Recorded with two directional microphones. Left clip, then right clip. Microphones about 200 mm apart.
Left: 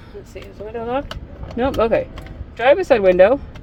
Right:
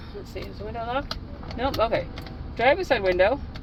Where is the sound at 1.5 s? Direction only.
60° left (ahead or behind).